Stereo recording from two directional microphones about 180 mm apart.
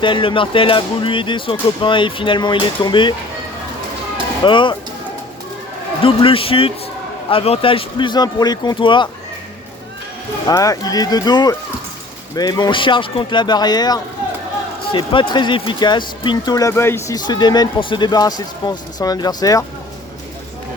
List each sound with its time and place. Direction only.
0.0 s a man's voice: 30° left (ahead or behind)
4.4 s a man's voice: 25° left (ahead or behind)
6.0 s a man's voice: 30° left (ahead or behind)
10.5 s a man's voice: 20° left (ahead or behind)